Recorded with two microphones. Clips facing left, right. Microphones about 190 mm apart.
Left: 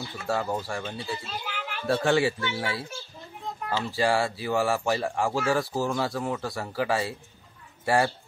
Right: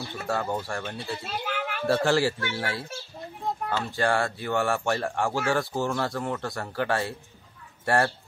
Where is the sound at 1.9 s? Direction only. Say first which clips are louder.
Even; centre (ahead or behind).